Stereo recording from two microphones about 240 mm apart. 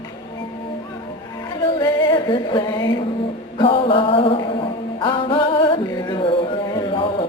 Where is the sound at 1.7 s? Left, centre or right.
Centre.